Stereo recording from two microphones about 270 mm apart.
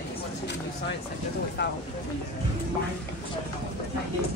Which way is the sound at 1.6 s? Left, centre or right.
Left.